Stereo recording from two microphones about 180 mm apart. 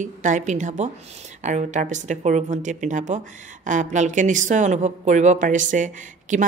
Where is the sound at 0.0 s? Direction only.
45° right (ahead or behind).